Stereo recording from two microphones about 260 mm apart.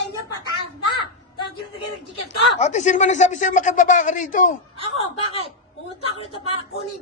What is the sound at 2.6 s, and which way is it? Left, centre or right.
Speech, left.